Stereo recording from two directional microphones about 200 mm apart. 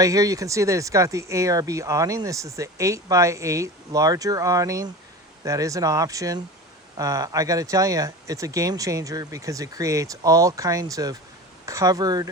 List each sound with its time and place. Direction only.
0.0 s speech: 15° right (ahead or behind)